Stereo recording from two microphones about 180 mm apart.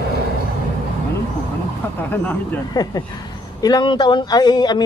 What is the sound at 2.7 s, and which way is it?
Speech, 20° left (ahead or behind).